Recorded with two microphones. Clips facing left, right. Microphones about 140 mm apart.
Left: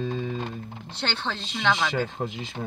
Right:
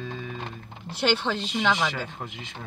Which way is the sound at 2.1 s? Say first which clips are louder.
Left 7 dB; 30° left (ahead or behind).